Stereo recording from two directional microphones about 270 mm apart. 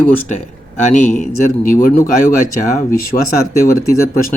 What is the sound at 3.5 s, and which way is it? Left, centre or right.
Speech, centre.